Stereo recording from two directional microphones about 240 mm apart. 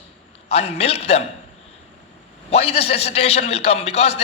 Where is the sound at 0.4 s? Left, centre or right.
Left.